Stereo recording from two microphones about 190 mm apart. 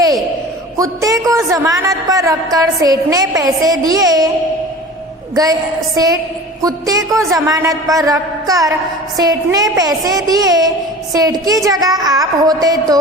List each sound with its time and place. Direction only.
0.8 s a woman's voice: 20° right (ahead or behind)
5.3 s a woman's voice: 20° right (ahead or behind)